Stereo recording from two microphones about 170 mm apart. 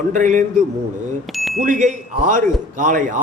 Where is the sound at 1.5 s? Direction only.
50° right (ahead or behind).